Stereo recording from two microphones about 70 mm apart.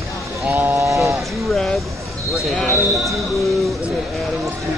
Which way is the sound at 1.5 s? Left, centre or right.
Centre.